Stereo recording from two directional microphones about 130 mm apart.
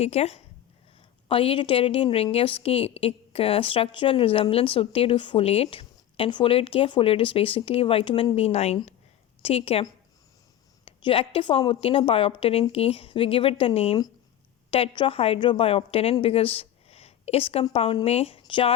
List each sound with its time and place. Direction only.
0.0 s a woman's voice: 55° left (ahead or behind)
1.3 s a woman's voice: 45° left (ahead or behind)
10.8 s a woman's voice: 45° left (ahead or behind)